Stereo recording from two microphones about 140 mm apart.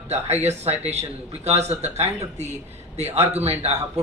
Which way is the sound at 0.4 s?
50° right (ahead or behind).